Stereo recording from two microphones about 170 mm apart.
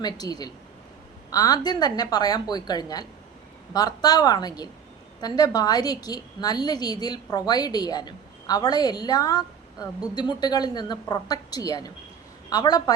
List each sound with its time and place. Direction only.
0.0 s a woman's voice: 20° left (ahead or behind)